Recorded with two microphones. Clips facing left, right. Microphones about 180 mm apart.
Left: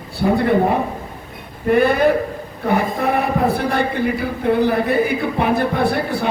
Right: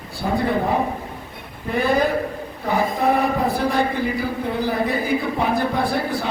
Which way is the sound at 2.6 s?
60° left (ahead or behind).